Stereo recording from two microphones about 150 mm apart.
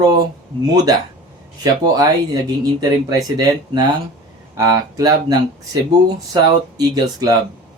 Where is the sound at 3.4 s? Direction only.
30° right (ahead or behind).